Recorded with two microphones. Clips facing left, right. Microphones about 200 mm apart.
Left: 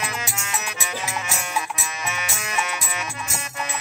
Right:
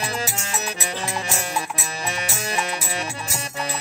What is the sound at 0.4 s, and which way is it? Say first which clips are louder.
Music: right 2 dB; 35° right (ahead or behind).